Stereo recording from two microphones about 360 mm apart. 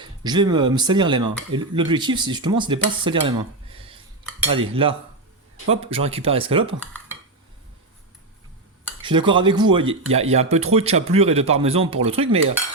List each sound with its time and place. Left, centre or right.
0.0 s speech: centre
9.0 s speech: centre